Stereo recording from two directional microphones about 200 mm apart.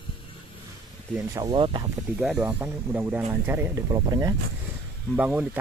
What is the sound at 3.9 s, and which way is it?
Speech, 20° right (ahead or behind).